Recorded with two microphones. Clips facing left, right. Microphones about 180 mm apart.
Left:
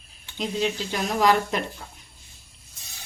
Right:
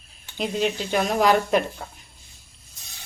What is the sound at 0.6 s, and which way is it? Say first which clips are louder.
Speech: right 4 dB; 55° right (ahead or behind).